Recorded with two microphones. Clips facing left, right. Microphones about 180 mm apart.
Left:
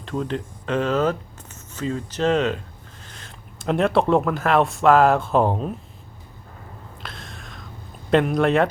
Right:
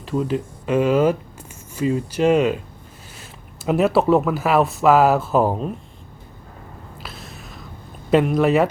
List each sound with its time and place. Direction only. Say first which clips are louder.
0.0 s speech: right 4 dB; 5° right (ahead or behind)
7.0 s a sound: right 1 dB; 5° right (ahead or behind)
8.1 s speech: right 2 dB; centre (ahead or behind)